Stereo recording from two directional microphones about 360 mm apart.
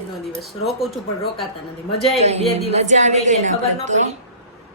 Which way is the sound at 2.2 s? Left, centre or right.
Centre.